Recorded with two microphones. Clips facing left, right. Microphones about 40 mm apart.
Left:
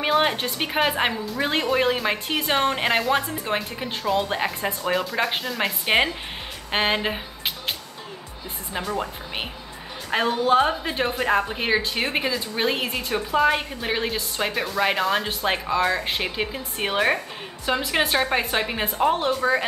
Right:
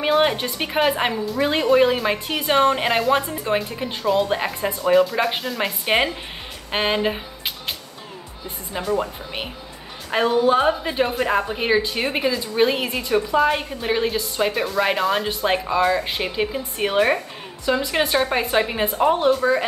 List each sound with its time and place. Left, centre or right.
0.0 s a woman's voice: centre
8.7 s a woman's voice: centre
17.7 s a woman's voice: centre
18.1 s a woman's voice: centre